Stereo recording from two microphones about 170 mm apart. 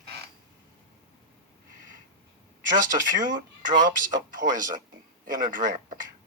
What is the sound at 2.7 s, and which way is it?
Speech, 50° right (ahead or behind).